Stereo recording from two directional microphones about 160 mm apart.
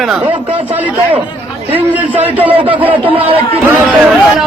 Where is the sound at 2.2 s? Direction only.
40° right (ahead or behind).